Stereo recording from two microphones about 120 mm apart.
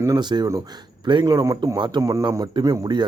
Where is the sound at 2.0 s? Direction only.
25° right (ahead or behind).